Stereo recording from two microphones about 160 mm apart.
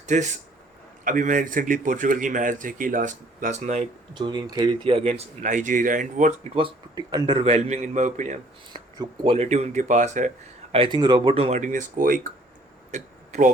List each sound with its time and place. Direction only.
0.0 s a man's voice: 50° right (ahead or behind)
4.1 s a man's voice: 25° right (ahead or behind); by 8.4 s 50° right (ahead or behind)
8.7 s speech: 30° right (ahead or behind); by 10.8 s 50° right (ahead or behind)
10.8 s speech: 30° right (ahead or behind); by 12.2 s 60° right (ahead or behind)
12.9 s a sound: 50° right (ahead or behind)